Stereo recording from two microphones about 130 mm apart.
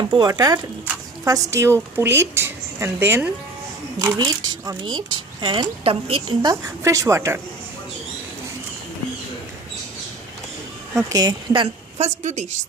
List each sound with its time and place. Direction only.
0.0 s a woman's voice: 35° right (ahead or behind); by 3.2 s 20° right (ahead or behind)
3.9 s a woman's voice: 30° right (ahead or behind); by 6.2 s 45° right (ahead or behind)
6.4 s a woman's voice: 25° right (ahead or behind)
11.1 s a woman's voice: 30° right (ahead or behind)
11.9 s a woman's voice: 60° right (ahead or behind)